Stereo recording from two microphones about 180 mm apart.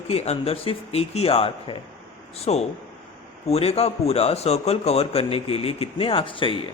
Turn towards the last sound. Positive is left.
turn(degrees=30)  # may be behind; listen again after turning